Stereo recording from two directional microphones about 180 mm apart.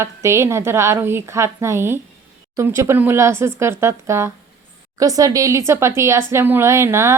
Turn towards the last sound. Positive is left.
turn(degrees=-15)  # may be behind; listen again after turning